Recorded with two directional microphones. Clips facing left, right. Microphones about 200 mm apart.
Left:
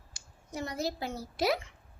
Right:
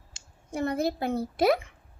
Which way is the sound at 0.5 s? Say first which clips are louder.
Right 7 dB; 55° right (ahead or behind).